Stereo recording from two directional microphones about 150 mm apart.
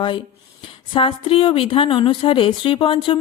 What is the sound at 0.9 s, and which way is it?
Speech, 35° left (ahead or behind).